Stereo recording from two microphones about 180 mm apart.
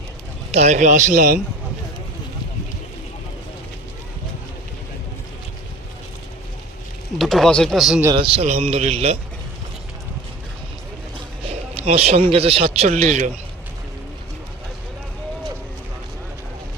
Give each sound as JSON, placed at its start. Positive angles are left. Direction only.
{"t": 0.5, "sound": "a man's voice", "side_deg": -40}
{"t": 7.2, "sound": "speech", "side_deg": 0}
{"t": 8.1, "sound": "speech", "side_deg": -30}
{"t": 11.7, "sound": "speech", "side_deg": -35}